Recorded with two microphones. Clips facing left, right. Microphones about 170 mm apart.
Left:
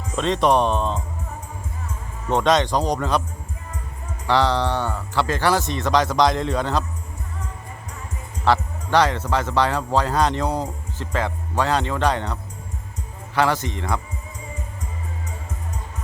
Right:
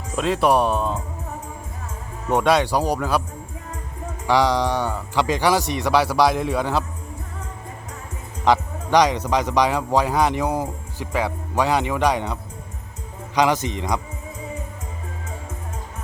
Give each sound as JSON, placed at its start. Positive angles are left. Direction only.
{"t": 0.2, "sound": "speech", "side_deg": -5}
{"t": 2.3, "sound": "speech", "side_deg": -10}
{"t": 4.3, "sound": "speech", "side_deg": -10}
{"t": 8.4, "sound": "speech", "side_deg": -15}